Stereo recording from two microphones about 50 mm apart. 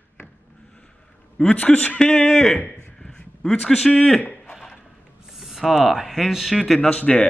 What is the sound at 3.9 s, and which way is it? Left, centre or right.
Speech, centre.